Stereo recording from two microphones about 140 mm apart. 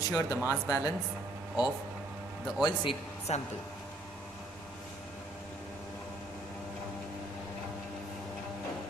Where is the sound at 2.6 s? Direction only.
40° left (ahead or behind).